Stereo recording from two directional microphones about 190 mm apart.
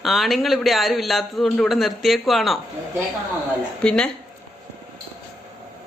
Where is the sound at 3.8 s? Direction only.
5° left (ahead or behind).